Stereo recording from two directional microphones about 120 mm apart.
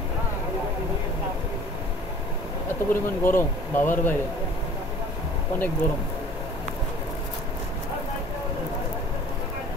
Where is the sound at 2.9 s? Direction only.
20° left (ahead or behind).